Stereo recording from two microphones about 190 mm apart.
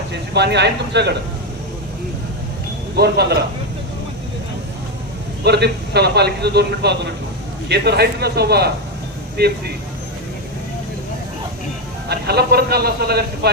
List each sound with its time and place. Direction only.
0.1 s a man's voice: 65° right (ahead or behind)
3.0 s a man's voice: 60° right (ahead or behind)
5.4 s a man's voice: 60° right (ahead or behind)
12.0 s a man's voice: 60° right (ahead or behind)